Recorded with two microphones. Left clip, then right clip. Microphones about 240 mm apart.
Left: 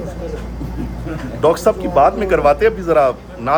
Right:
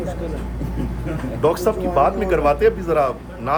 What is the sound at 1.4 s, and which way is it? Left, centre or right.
A man's voice, left.